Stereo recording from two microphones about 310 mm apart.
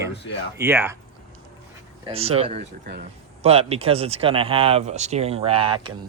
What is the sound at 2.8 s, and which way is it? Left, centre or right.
Speech, right.